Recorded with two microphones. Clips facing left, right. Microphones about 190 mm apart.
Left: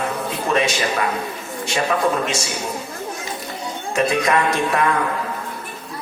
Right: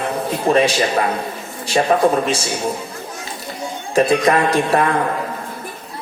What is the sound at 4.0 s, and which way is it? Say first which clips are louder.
Speech: right 4 dB; 35° right (ahead or behind).